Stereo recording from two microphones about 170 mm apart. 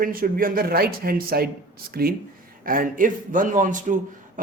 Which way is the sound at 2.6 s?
55° right (ahead or behind).